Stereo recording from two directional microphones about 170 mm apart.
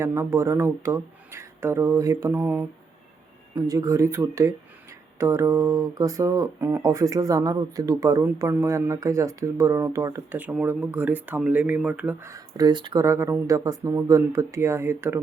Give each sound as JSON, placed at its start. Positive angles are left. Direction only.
{"t": 0.0, "sound": "speech", "side_deg": -15}